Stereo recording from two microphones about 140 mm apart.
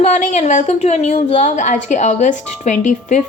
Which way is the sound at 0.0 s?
55° left (ahead or behind).